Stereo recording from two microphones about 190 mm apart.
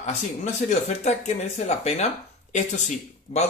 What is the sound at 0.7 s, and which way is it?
Speech, 35° left (ahead or behind).